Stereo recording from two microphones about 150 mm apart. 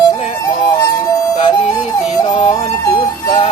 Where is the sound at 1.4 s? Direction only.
40° left (ahead or behind).